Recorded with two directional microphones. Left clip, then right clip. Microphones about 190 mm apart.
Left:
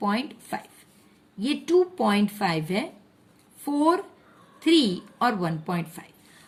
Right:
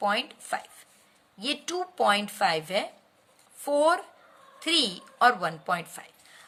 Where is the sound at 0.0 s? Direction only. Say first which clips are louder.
Right 1 dB; 25° right (ahead or behind).